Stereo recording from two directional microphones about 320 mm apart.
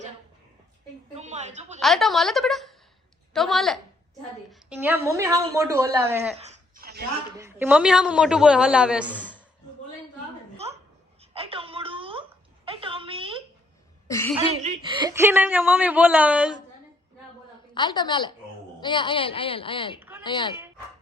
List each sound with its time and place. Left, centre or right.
1.1 s a woman's voice: right
1.8 s a woman's voice: centre
6.3 s a sound: right
7.3 s speech: centre
11.2 s a sound: centre
14.1 s speech: centre
14.3 s speech: centre
17.7 s speech: centre
20.0 s a sound: centre
20.2 s speech: centre